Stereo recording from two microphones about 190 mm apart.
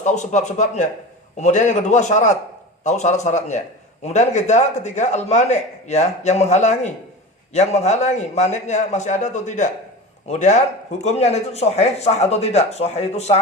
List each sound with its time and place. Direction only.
0.0 s speech: 40° left (ahead or behind)